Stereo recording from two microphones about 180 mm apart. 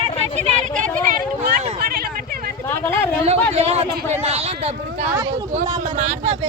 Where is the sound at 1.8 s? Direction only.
55° right (ahead or behind).